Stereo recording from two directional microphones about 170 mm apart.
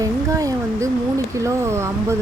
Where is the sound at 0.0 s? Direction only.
20° right (ahead or behind).